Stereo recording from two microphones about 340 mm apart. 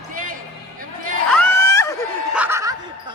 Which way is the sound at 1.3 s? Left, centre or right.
Centre.